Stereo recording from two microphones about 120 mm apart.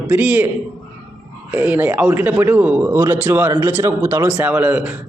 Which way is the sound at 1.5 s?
15° right (ahead or behind).